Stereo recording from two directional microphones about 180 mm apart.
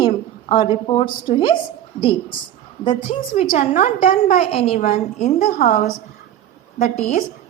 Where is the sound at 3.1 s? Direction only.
40° left (ahead or behind).